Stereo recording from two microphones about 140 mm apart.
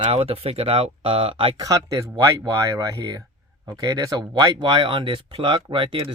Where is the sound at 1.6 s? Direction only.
25° right (ahead or behind).